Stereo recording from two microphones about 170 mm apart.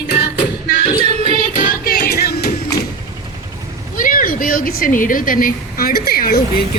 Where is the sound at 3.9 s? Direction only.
55° left (ahead or behind).